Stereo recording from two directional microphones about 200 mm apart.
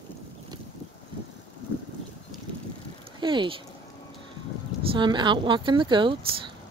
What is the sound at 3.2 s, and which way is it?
Speech, 25° right (ahead or behind).